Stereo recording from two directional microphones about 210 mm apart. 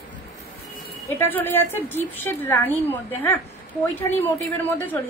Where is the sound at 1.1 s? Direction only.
10° left (ahead or behind).